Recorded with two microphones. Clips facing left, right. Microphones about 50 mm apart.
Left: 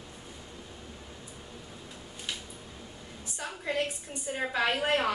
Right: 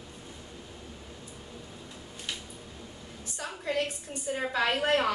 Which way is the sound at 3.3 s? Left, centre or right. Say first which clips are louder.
Right 1 dB; centre.